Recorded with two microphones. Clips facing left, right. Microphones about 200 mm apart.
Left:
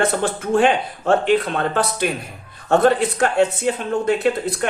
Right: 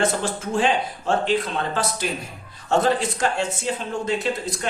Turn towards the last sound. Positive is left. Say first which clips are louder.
# left 6 dB
turn(degrees=60)  # may be behind; listen again after turning